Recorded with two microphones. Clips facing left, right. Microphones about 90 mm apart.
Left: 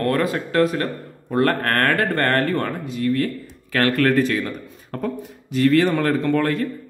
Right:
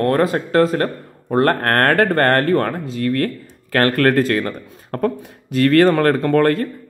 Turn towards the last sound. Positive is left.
turn(degrees=-55)  # may be behind; listen again after turning